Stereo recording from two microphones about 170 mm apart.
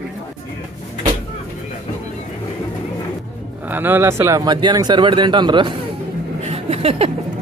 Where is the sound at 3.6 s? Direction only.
10° right (ahead or behind); by 5.8 s 30° right (ahead or behind).